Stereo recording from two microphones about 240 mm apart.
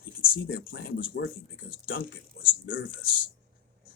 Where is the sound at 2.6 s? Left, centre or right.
Left.